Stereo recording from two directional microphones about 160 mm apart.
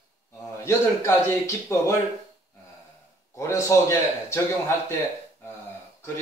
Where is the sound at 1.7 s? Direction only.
20° left (ahead or behind).